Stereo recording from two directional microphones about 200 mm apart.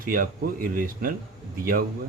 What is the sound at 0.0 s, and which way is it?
Speech, 45° right (ahead or behind).